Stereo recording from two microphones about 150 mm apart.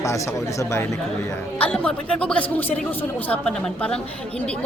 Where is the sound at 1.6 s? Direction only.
5° left (ahead or behind).